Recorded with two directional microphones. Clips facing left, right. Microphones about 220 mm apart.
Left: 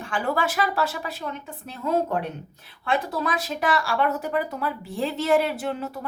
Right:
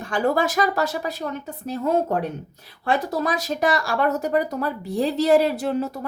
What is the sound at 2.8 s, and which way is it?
Speech, 40° right (ahead or behind).